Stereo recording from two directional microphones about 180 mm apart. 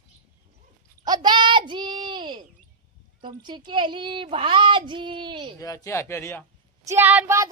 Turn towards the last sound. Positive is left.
turn(degrees=-10)  # may be behind; listen again after turning